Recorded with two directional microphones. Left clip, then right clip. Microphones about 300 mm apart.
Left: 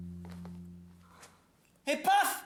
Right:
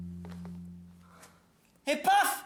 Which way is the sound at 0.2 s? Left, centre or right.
Centre.